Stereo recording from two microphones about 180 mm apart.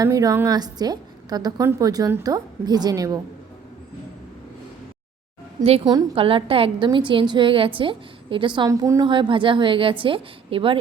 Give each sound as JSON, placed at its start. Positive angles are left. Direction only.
{"t": 0.0, "sound": "a woman's voice", "side_deg": -20}
{"t": 5.6, "sound": "a woman's voice", "side_deg": -35}